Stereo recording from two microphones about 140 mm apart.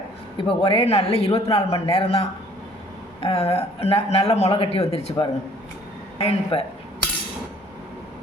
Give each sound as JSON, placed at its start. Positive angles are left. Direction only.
{"t": 0.4, "sound": "speech", "side_deg": 40}